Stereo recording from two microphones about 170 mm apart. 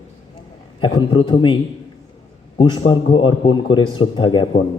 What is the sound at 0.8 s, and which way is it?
A man's voice, 30° left (ahead or behind).